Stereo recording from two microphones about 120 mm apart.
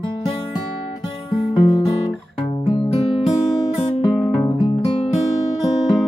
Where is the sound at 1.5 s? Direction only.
40° left (ahead or behind).